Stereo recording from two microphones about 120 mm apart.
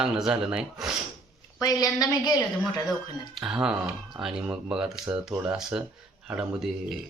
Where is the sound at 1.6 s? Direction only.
30° left (ahead or behind).